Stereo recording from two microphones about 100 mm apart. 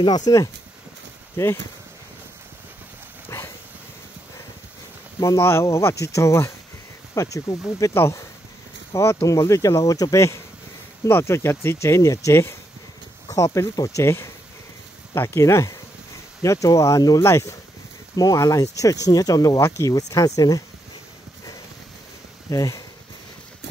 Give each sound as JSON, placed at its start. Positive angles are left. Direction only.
{"t": 0.3, "sound": "speech", "side_deg": 45}
{"t": 1.3, "sound": "speech", "side_deg": 25}
{"t": 3.3, "sound": "dog", "side_deg": 25}
{"t": 5.2, "sound": "speech", "side_deg": 25}
{"t": 22.5, "sound": "speech", "side_deg": 35}